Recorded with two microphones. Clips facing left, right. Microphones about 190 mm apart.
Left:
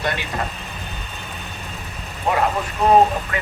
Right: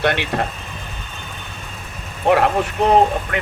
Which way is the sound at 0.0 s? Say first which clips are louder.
Right 6 dB; 70° right (ahead or behind).